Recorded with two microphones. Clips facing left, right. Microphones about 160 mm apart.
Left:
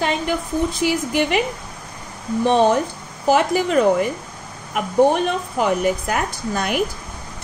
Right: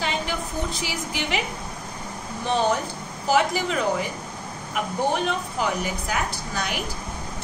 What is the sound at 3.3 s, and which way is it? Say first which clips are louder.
Speech: left 5 dB; 50° left (ahead or behind).